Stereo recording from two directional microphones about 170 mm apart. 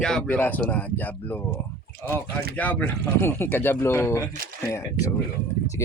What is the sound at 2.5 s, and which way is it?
Speech, 10° left (ahead or behind).